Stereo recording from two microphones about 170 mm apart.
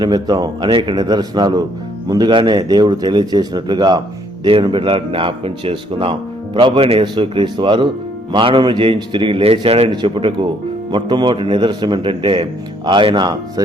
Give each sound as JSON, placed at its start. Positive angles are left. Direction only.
{"t": 0.0, "sound": "speech", "side_deg": -25}